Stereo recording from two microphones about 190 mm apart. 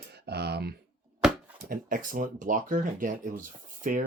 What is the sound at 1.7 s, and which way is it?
Speech, 45° right (ahead or behind).